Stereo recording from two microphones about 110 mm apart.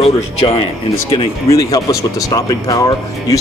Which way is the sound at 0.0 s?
60° left (ahead or behind).